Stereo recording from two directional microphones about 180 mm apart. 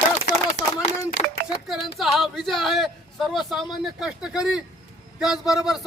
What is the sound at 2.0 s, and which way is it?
Speech, centre (ahead or behind).